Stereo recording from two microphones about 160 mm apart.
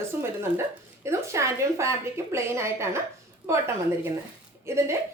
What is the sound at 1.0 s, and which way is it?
A woman's voice, 15° right (ahead or behind).